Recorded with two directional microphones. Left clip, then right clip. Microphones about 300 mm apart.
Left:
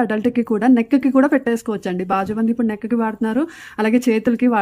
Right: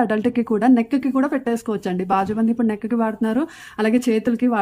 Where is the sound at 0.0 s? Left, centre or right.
Centre.